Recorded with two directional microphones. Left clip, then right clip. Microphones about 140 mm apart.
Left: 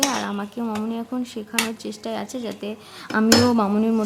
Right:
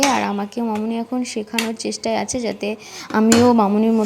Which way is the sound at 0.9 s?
15° right (ahead or behind).